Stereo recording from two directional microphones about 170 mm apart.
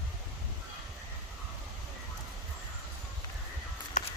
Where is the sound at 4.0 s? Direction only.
45° left (ahead or behind).